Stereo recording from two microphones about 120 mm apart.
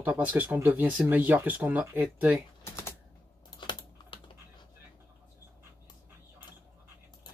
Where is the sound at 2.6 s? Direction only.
20° left (ahead or behind).